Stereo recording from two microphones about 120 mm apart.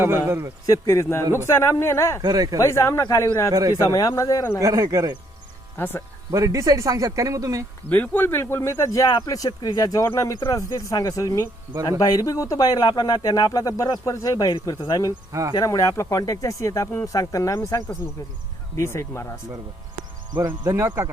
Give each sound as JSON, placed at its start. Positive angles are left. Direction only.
{"t": 0.0, "sound": "speech", "side_deg": -20}
{"t": 0.7, "sound": "speech", "side_deg": 25}
{"t": 2.2, "sound": "speech", "side_deg": -35}
{"t": 2.6, "sound": "speech", "side_deg": 25}
{"t": 3.5, "sound": "speech", "side_deg": -30}
{"t": 3.9, "sound": "speech", "side_deg": 30}
{"t": 4.6, "sound": "speech", "side_deg": -30}
{"t": 5.7, "sound": "speech", "side_deg": 20}
{"t": 6.3, "sound": "speech", "side_deg": -30}
{"t": 7.9, "sound": "speech", "side_deg": 15}
{"t": 15.3, "sound": "speech", "side_deg": -30}
{"t": 15.5, "sound": "speech", "side_deg": 30}
{"t": 20.5, "sound": "speech", "side_deg": -20}